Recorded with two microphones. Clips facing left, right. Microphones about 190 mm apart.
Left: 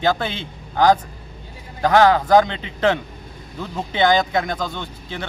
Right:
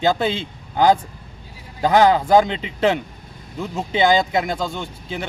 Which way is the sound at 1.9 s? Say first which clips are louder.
Even; 15° right (ahead or behind).